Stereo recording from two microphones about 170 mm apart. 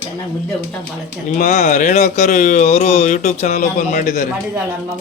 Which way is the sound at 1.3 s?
45° left (ahead or behind).